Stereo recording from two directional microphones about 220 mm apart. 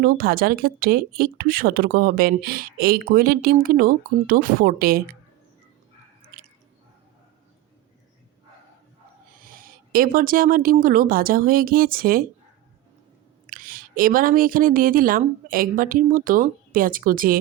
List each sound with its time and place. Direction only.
0.0 s speech: 40° right (ahead or behind)
9.3 s speech: 40° right (ahead or behind)
13.5 s speech: 40° right (ahead or behind)